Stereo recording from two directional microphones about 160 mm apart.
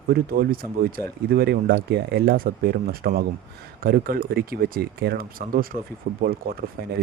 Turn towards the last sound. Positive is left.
turn(degrees=-75)  # may be behind; listen again after turning